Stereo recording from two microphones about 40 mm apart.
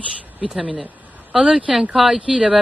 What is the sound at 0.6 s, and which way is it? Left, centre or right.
Speech, right.